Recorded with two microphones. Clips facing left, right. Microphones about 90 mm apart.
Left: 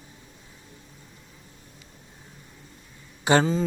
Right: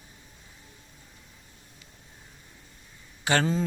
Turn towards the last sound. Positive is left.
turn(degrees=20)  # may be behind; listen again after turning